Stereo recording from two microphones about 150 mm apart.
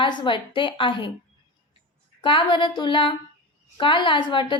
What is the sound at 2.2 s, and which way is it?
A woman's voice, 35° left (ahead or behind).